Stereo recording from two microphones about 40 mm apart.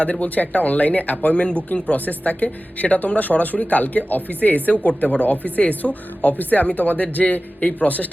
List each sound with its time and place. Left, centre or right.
0.0 s speech: left